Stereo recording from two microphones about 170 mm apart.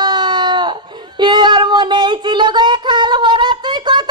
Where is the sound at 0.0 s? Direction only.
25° right (ahead or behind).